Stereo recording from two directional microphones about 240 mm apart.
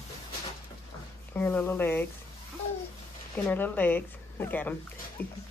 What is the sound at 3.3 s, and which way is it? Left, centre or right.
Speech, centre.